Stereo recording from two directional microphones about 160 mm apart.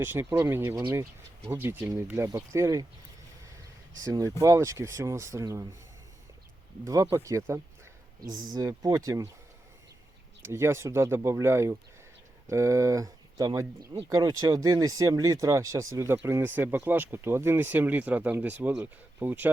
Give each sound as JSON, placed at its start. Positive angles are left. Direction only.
{"t": 0.0, "sound": "speech", "side_deg": -15}
{"t": 4.0, "sound": "speech", "side_deg": -20}
{"t": 6.8, "sound": "speech", "side_deg": -20}
{"t": 10.4, "sound": "speech", "side_deg": -15}